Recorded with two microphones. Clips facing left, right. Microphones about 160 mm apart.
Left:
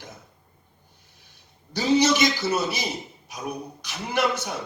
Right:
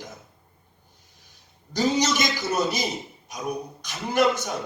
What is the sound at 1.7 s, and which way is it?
Speech, 50° right (ahead or behind).